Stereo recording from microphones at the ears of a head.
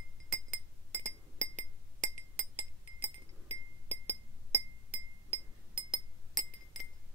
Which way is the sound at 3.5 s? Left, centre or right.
Right.